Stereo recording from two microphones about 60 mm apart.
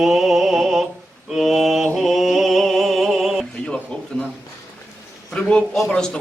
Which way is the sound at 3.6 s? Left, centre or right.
Centre.